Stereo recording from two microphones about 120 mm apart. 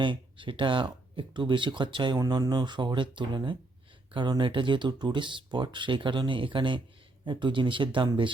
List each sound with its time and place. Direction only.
0.0 s speech: 40° right (ahead or behind)